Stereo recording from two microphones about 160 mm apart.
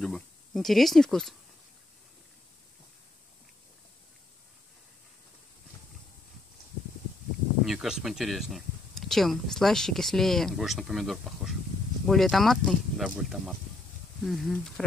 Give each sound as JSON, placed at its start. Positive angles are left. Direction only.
{"t": 0.0, "sound": "speech", "side_deg": 5}
{"t": 7.6, "sound": "speech", "side_deg": 0}